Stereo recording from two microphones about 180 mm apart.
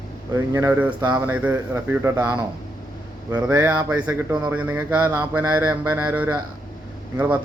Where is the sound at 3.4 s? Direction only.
15° right (ahead or behind).